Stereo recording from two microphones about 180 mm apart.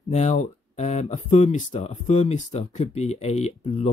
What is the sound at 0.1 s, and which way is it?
Speech, 40° left (ahead or behind).